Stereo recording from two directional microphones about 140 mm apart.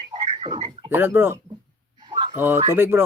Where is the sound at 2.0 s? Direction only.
30° right (ahead or behind).